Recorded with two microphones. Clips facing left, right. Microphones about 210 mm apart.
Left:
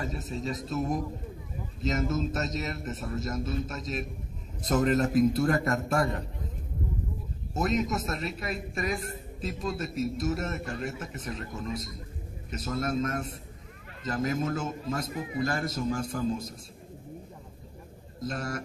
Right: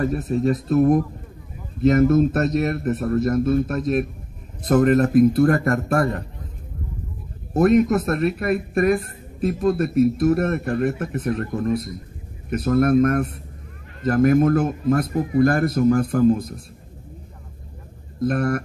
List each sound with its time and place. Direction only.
0.0 s a man's voice: 60° right (ahead or behind)
7.5 s a man's voice: 60° right (ahead or behind)
18.2 s a man's voice: 60° right (ahead or behind)